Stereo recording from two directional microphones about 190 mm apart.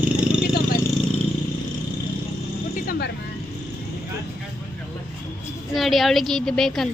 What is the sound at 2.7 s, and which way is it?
Vehicle, 50° left (ahead or behind).